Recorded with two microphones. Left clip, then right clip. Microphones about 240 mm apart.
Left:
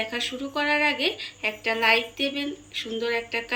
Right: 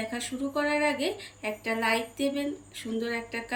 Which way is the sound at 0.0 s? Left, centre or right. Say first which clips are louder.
Left 5 dB; centre.